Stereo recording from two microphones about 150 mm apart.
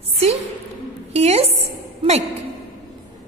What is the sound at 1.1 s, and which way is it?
Speech, 45° right (ahead or behind).